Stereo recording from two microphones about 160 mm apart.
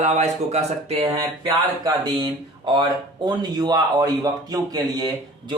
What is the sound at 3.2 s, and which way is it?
A man's voice, 25° right (ahead or behind).